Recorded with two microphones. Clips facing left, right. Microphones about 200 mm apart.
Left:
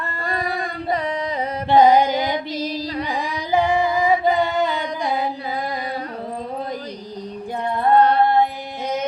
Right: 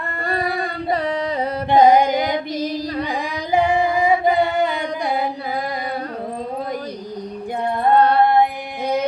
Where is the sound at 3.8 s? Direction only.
30° right (ahead or behind).